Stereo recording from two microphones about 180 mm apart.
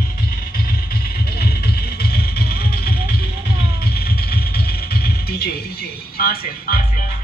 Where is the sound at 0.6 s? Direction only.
60° left (ahead or behind).